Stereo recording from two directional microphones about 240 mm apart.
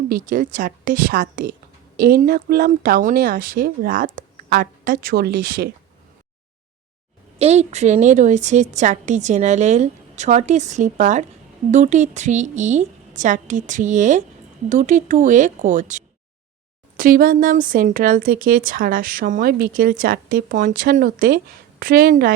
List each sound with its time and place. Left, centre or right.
0.1 s speech: right
7.3 s a woman's voice: right